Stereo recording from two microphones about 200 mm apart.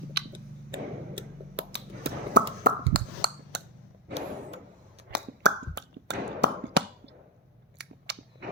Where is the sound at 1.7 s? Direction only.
55° right (ahead or behind).